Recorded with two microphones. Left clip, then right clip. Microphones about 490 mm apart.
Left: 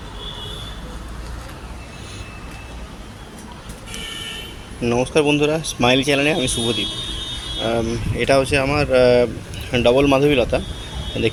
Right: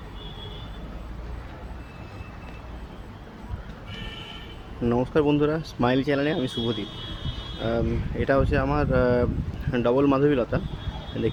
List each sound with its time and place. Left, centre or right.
4.8 s speech: right